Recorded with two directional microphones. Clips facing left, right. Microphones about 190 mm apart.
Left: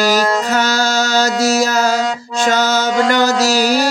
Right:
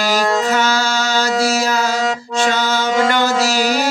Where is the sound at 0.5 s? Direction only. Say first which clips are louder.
Left 2 dB; 40° left (ahead or behind).